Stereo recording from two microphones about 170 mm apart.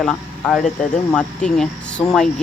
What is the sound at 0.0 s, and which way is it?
Speech, 5° left (ahead or behind).